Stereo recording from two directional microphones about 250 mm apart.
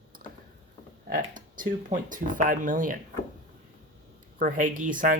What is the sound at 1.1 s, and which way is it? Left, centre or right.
Speech, right.